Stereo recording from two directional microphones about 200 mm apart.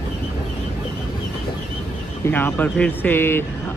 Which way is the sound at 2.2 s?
10° left (ahead or behind).